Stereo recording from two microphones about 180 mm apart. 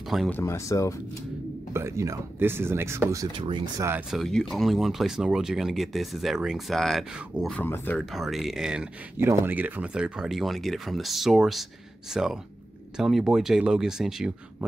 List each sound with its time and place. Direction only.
0.3 s speech: 15° left (ahead or behind)
1.7 s speech: 15° right (ahead or behind)
3.3 s speech: 30° right (ahead or behind)
4.1 s speech: centre (ahead or behind)